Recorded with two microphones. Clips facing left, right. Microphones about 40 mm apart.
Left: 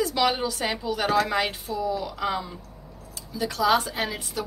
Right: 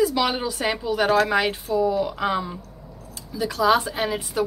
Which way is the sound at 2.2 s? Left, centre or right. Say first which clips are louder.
Right 4 dB; right.